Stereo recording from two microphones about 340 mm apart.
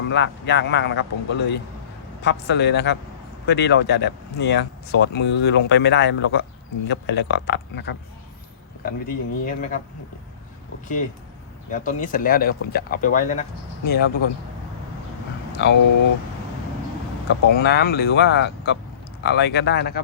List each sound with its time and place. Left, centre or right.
0.1 s speech: left
11.7 s speech: left
15.6 s speech: left
17.4 s speech: left